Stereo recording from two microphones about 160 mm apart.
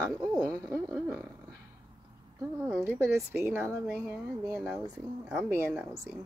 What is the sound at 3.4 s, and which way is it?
Speech, 15° right (ahead or behind).